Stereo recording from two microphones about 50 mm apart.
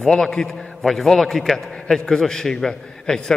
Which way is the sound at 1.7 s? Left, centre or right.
Centre.